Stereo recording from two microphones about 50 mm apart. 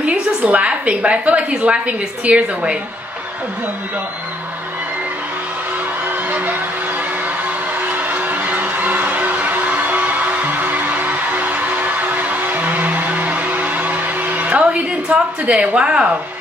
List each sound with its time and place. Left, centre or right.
0.0 s a woman's voice: right
7.4 s vehicle: right
14.7 s a woman's voice: right